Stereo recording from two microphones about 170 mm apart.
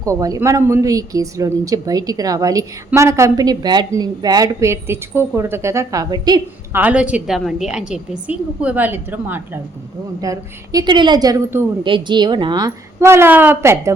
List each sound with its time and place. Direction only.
0.0 s speech: 20° right (ahead or behind)
6.7 s a woman's voice: 10° right (ahead or behind)
11.8 s speech: 30° right (ahead or behind)